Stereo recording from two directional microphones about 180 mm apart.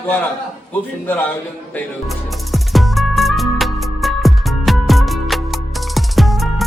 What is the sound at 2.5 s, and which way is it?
Music, centre (ahead or behind).